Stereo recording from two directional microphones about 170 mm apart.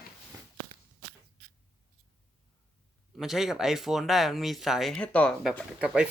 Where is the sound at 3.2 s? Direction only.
Centre (ahead or behind).